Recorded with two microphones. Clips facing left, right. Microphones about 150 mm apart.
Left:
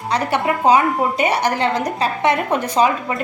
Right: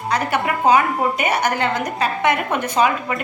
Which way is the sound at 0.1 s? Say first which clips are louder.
Left 2 dB; 30° left (ahead or behind).